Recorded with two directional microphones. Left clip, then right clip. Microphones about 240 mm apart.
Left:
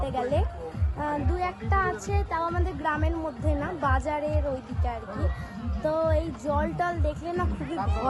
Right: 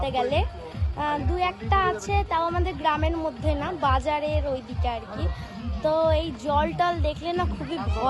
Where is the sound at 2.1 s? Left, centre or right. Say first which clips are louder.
Right 4 dB; centre.